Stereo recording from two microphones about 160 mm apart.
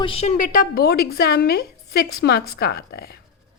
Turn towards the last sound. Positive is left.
turn(degrees=80)